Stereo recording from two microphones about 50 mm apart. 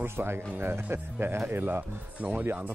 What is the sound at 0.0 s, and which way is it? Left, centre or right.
Speech, right.